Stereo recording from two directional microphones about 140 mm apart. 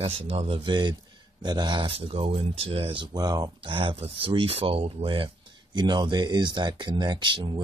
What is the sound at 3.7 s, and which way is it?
Speech, 40° right (ahead or behind).